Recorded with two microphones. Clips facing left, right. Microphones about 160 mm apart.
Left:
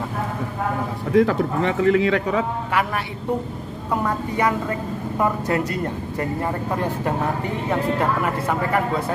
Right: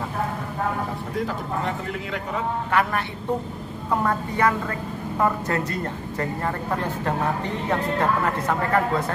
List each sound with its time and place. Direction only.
1.1 s speech: 90° left
2.7 s speech: 15° left (ahead or behind)
4.0 s speech: 15° left (ahead or behind)
8.0 s speech: 10° left (ahead or behind)